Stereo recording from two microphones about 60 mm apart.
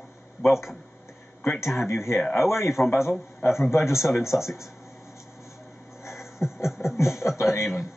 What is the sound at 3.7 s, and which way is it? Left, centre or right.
Speech, left.